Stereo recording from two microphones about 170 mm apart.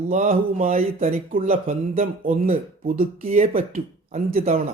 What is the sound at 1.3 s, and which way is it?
Speech, 50° right (ahead or behind).